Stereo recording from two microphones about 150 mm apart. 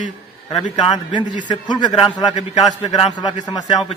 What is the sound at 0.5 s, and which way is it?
A man's voice, 30° left (ahead or behind).